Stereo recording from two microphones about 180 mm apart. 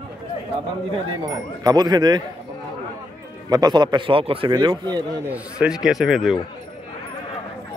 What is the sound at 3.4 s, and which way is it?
A man's voice, 20° right (ahead or behind).